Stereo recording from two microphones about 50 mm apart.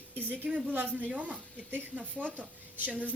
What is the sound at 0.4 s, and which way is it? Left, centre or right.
A woman's voice, right.